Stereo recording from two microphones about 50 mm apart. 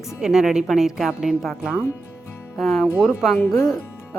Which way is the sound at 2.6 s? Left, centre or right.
Centre.